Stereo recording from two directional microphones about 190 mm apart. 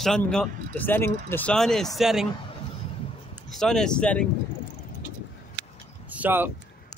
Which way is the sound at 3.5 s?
5° left (ahead or behind).